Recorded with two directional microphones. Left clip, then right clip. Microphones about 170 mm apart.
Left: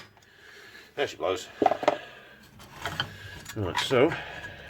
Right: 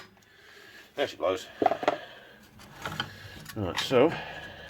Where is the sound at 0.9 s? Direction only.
20° right (ahead or behind).